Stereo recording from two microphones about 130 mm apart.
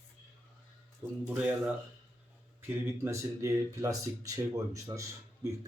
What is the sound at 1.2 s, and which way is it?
Speech, 15° right (ahead or behind).